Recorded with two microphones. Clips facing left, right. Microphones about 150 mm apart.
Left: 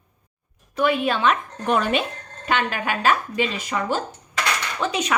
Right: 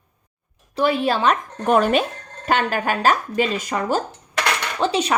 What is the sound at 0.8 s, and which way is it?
Speech, 35° right (ahead or behind).